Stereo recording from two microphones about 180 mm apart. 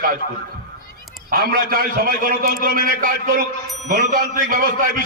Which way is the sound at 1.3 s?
55° right (ahead or behind).